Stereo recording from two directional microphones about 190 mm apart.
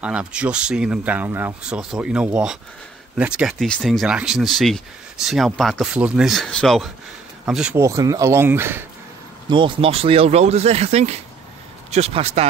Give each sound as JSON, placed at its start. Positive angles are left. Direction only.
{"t": 0.0, "sound": "speech", "side_deg": -5}
{"t": 7.8, "sound": "speech", "side_deg": -15}
{"t": 9.5, "sound": "speech", "side_deg": -25}